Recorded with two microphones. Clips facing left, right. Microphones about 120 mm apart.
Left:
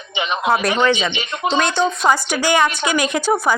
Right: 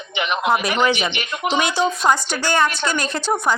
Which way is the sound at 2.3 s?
15° left (ahead or behind).